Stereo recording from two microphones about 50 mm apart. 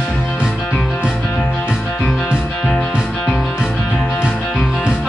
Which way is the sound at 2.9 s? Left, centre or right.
Centre.